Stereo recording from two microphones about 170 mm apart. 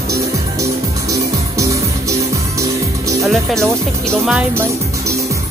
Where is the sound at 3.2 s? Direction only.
Centre (ahead or behind).